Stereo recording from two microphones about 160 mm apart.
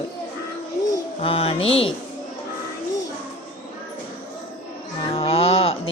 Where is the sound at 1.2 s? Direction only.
35° left (ahead or behind).